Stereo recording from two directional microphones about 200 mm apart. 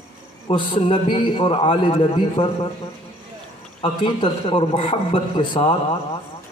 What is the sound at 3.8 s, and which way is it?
A man's voice, 25° left (ahead or behind).